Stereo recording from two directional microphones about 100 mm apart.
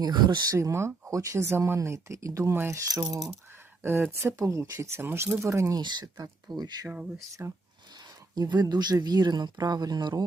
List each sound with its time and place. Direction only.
0.0 s speech: 45° right (ahead or behind)
0.5 s speech: 30° right (ahead or behind)
5.8 s speech: 45° right (ahead or behind)
7.4 s speech: 25° right (ahead or behind)
7.9 s speech: 45° right (ahead or behind)